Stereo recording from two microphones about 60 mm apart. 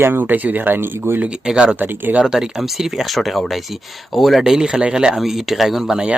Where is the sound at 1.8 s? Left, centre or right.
Right.